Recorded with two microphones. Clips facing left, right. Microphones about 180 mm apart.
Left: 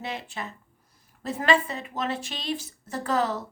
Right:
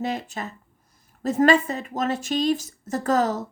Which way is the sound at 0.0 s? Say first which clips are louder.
Right 6 dB; 40° right (ahead or behind).